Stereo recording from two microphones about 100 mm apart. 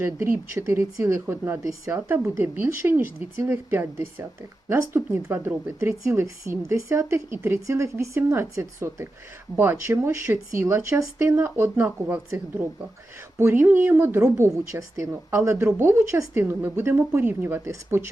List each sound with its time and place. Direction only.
0.0 s speech: 25° right (ahead or behind)